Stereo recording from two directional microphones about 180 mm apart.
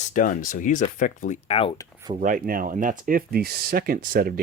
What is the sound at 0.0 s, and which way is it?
Speech, 45° left (ahead or behind).